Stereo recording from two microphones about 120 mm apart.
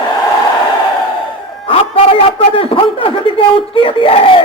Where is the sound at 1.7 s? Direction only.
50° left (ahead or behind).